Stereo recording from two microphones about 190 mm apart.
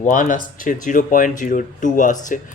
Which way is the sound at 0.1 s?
45° left (ahead or behind).